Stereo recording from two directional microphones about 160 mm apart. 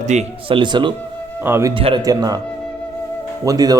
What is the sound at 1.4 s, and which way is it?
Speech, 15° right (ahead or behind).